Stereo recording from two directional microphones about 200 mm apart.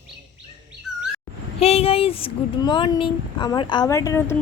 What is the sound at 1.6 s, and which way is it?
Speech, 30° left (ahead or behind).